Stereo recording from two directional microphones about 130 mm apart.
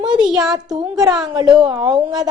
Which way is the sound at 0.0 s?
35° right (ahead or behind).